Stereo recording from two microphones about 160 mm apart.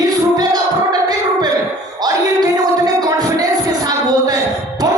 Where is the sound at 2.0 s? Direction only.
25° right (ahead or behind).